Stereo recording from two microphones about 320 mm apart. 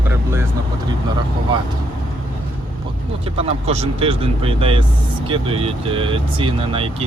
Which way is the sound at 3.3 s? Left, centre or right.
Centre.